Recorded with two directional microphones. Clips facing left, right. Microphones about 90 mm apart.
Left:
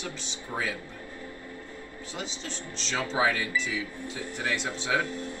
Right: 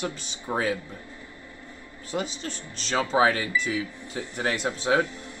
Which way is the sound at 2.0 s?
50° right (ahead or behind).